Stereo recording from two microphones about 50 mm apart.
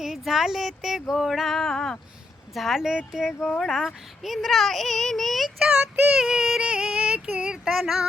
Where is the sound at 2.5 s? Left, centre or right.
Centre.